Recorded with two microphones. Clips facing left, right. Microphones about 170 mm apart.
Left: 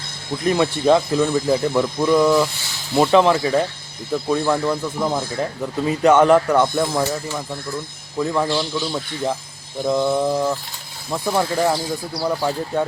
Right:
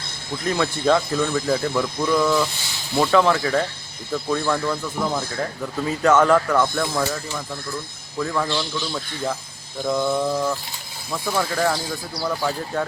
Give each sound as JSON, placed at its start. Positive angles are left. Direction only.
{"t": 0.4, "sound": "speech", "side_deg": 20}